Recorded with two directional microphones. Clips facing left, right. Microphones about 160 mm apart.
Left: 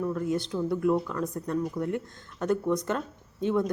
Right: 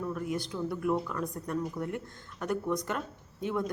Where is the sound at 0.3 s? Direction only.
25° left (ahead or behind).